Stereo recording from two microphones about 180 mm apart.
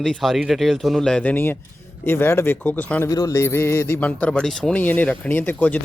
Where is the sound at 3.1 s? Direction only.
20° left (ahead or behind).